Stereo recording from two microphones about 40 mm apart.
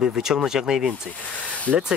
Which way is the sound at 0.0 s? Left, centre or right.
Centre.